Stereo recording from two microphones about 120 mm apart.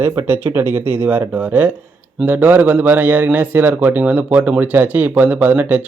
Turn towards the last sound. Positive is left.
turn(degrees=-15)  # may be behind; listen again after turning